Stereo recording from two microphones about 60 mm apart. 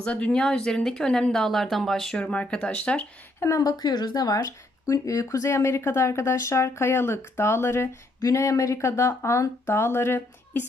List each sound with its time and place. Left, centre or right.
0.0 s speech: left
0.3 s speech: centre
2.1 s speech: centre
3.4 s a woman's voice: left
4.9 s speech: left
8.2 s speech: left